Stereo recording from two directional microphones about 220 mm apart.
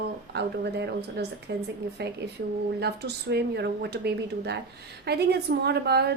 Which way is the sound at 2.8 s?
50° right (ahead or behind).